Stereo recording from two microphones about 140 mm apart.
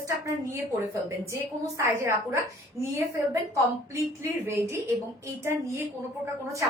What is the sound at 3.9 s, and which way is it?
A woman's voice, 20° right (ahead or behind).